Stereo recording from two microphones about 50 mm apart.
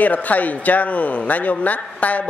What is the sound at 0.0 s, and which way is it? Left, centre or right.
A man's voice, left.